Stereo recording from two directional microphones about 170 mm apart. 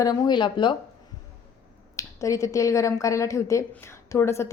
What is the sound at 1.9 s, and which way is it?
A woman's voice, 20° left (ahead or behind).